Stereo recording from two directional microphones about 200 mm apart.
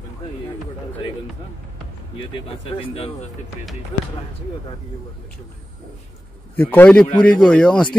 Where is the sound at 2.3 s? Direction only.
30° left (ahead or behind).